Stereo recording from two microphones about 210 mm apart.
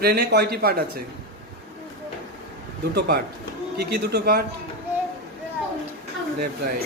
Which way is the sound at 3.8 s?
50° right (ahead or behind).